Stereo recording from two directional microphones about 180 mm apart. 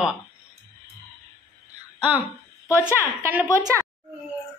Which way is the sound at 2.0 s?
10° right (ahead or behind).